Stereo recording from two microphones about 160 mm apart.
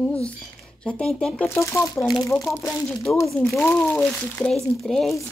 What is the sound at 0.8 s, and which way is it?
Speech, 5° left (ahead or behind).